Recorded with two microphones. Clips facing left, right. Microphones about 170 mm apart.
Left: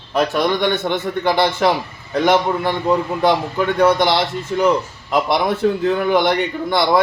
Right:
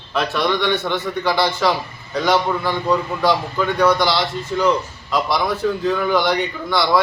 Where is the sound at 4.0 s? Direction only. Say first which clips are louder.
Left 2 dB; 55° left (ahead or behind).